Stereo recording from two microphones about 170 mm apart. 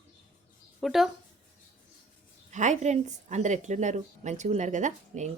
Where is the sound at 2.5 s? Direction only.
45° right (ahead or behind).